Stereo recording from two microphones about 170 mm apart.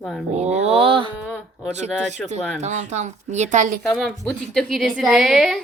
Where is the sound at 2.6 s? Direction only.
45° right (ahead or behind).